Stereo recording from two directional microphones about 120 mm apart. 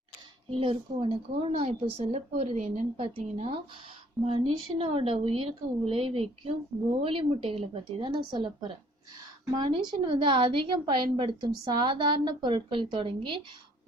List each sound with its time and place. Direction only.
0.5 s a woman's voice: 50° right (ahead or behind); by 3.5 s 70° right (ahead or behind)
4.2 s a woman's voice: 50° right (ahead or behind)